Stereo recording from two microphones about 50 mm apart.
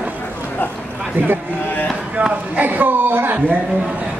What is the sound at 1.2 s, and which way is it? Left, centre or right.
Speech, right.